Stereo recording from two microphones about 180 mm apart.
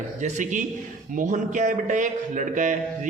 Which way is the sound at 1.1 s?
45° right (ahead or behind).